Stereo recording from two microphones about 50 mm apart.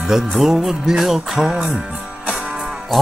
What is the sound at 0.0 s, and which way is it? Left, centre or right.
Music, centre.